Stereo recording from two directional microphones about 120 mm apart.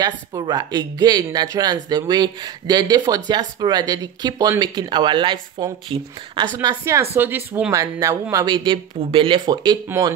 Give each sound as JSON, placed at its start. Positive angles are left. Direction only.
{"t": 0.0, "sound": "speech", "side_deg": -35}
{"t": 6.8, "sound": "speech", "side_deg": -20}
{"t": 7.7, "sound": "speech", "side_deg": -25}
{"t": 8.5, "sound": "speech", "side_deg": -40}